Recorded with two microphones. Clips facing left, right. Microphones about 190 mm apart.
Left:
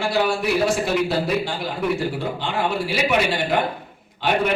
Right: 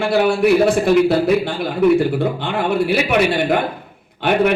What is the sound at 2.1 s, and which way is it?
A man's voice, 55° right (ahead or behind).